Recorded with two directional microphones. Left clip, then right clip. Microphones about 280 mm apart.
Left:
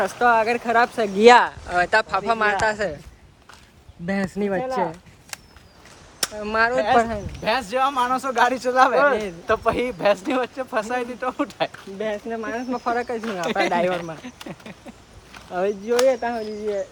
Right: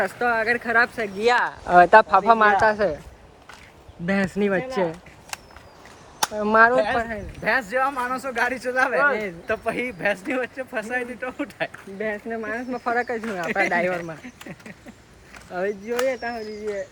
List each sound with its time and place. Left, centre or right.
0.0 s speech: centre
1.1 s speech: left
1.5 s speech: centre
4.4 s speech: left
4.6 s speech: centre
5.3 s walk: centre
6.3 s speech: centre
11.9 s speech: centre
13.5 s speech: centre